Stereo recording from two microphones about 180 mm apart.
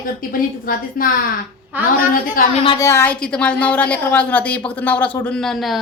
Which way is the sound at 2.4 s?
50° left (ahead or behind).